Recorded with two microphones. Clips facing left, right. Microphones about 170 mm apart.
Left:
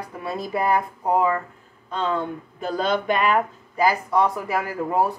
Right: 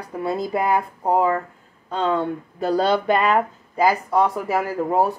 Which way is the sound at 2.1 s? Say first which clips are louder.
Right 4 dB; 35° right (ahead or behind).